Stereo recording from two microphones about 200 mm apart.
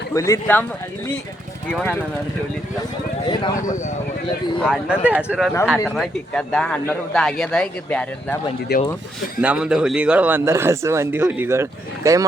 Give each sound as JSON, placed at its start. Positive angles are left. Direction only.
{"t": 0.1, "sound": "speech", "side_deg": 15}
{"t": 1.7, "sound": "speech", "side_deg": 10}
{"t": 4.6, "sound": "speech", "side_deg": 0}
{"t": 8.7, "sound": "speech", "side_deg": 55}
{"t": 9.4, "sound": "speech", "side_deg": -5}